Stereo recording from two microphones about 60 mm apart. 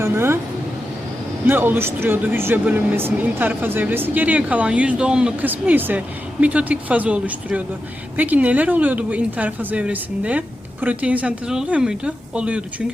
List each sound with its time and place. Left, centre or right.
0.0 s speech: right
1.5 s speech: right; by 5.3 s centre
5.4 s speech: right